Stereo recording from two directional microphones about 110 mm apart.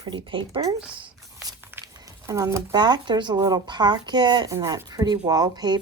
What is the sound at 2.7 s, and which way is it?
Speech, 40° right (ahead or behind).